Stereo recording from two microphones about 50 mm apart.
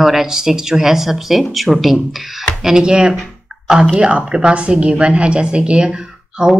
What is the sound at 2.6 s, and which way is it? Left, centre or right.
Speech, centre.